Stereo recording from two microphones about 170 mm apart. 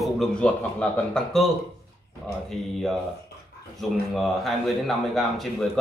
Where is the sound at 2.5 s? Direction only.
Centre (ahead or behind).